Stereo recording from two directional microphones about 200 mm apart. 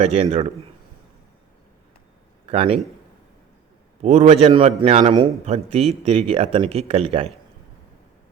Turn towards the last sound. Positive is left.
turn(degrees=-30)  # may be behind; listen again after turning